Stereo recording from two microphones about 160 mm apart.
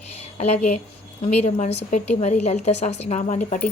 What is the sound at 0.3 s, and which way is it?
A woman's voice, 45° left (ahead or behind).